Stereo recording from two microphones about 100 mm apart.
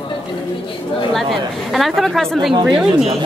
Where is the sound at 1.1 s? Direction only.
Centre (ahead or behind).